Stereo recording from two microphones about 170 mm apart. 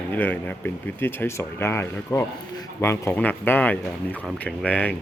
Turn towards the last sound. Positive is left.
turn(degrees=10)  # may be behind; listen again after turning